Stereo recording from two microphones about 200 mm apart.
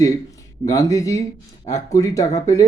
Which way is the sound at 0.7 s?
15° left (ahead or behind).